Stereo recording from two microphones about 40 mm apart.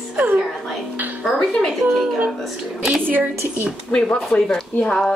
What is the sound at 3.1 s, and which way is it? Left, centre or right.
Speech, right.